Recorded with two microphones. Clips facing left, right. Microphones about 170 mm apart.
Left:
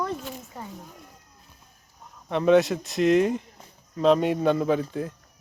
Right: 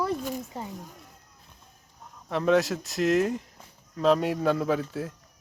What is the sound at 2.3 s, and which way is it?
Speech, centre (ahead or behind).